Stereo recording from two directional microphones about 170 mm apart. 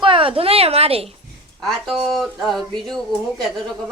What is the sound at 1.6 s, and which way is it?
Speech, centre (ahead or behind).